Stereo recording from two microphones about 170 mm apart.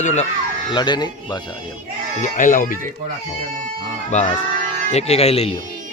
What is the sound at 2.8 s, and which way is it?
Speech, 50° right (ahead or behind).